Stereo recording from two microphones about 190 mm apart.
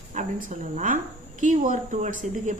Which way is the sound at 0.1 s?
40° right (ahead or behind).